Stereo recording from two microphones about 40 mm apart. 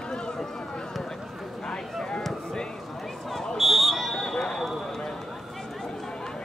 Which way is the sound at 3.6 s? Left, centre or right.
Centre.